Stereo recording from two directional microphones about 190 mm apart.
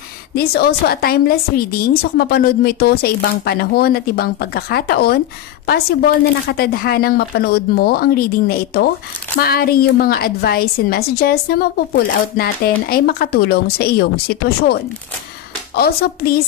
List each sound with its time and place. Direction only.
0.3 s a woman's voice: 55° left (ahead or behind)